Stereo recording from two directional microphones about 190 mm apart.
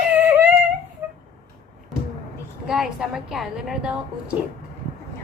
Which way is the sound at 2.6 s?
5° right (ahead or behind).